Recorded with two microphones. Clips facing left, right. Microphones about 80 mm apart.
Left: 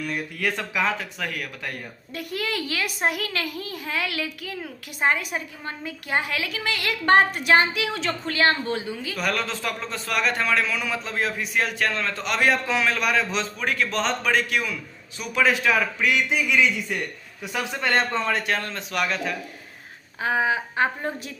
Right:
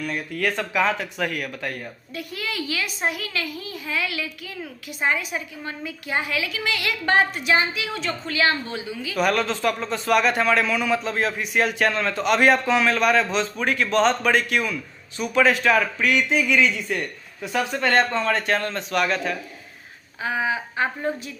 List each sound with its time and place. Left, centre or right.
0.0 s a man's voice: centre
2.1 s a child's voice: left
8.3 s a woman's voice: left
9.1 s a man's voice: centre
20.2 s a woman's voice: left